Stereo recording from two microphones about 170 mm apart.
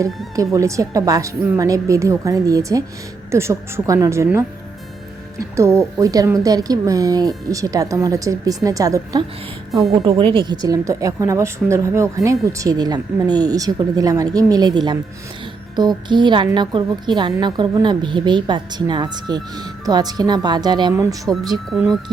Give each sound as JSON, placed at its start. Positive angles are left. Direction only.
{"t": 0.3, "sound": "a woman's voice", "side_deg": -20}
{"t": 9.9, "sound": "a woman's voice", "side_deg": -30}
{"t": 21.7, "sound": "speech", "side_deg": 0}